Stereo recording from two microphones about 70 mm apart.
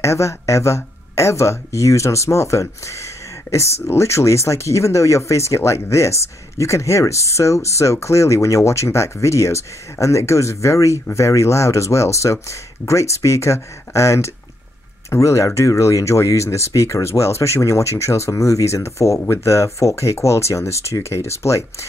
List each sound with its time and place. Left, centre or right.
0.0 s speech: left